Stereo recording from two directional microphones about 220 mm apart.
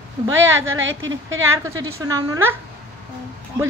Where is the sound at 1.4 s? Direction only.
15° right (ahead or behind).